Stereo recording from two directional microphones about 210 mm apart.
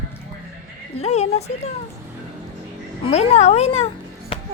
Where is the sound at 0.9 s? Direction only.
30° left (ahead or behind).